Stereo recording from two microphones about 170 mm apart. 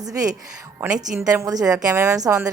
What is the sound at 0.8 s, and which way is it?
Speech, 5° right (ahead or behind).